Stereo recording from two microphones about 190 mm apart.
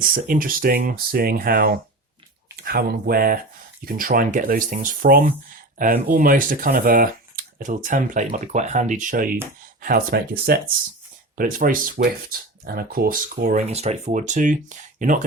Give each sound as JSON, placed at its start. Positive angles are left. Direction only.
{"t": 0.0, "sound": "speech", "side_deg": -45}